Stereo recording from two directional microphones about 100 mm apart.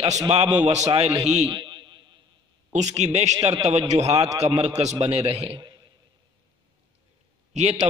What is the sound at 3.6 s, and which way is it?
Speech, 90° right.